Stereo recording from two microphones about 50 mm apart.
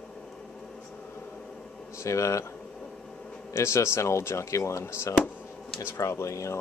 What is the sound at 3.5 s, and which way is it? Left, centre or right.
Speech, left.